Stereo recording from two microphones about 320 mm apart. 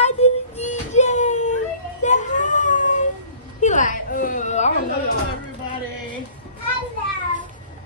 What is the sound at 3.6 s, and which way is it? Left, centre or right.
Speech, left.